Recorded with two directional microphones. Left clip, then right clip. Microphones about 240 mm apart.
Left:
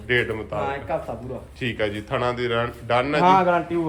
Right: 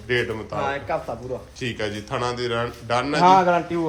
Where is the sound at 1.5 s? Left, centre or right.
Centre.